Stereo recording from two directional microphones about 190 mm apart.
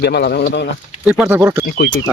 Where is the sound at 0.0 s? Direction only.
60° left (ahead or behind).